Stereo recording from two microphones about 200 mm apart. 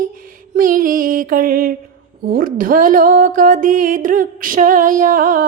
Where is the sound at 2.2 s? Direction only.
45° right (ahead or behind).